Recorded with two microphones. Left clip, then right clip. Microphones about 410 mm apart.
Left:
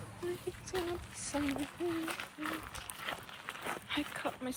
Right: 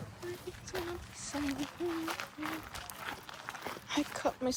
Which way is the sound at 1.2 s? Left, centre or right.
Centre.